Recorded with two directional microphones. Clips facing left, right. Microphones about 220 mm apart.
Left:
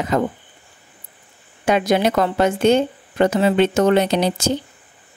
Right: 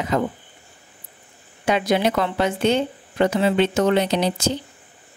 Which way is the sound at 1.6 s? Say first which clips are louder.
Left 3 dB; 45° left (ahead or behind).